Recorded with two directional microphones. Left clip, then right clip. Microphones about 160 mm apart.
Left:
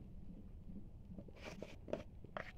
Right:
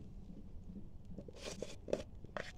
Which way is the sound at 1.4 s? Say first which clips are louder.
Right 6 dB; 90° right.